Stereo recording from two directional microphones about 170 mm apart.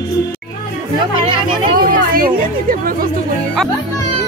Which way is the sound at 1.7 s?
55° right (ahead or behind).